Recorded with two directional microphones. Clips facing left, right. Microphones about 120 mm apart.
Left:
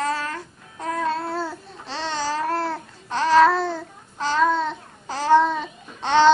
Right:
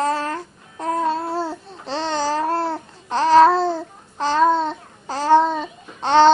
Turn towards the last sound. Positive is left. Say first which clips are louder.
# right 3 dB
turn(degrees=-35)  # may be behind; listen again after turning